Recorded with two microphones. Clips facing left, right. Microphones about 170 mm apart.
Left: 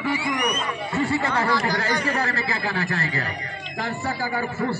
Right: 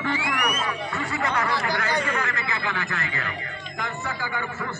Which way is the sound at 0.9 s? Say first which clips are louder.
Left 4 dB; 30° left (ahead or behind).